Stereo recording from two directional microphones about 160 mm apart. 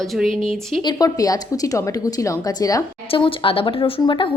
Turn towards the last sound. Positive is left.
turn(degrees=30)  # may be behind; listen again after turning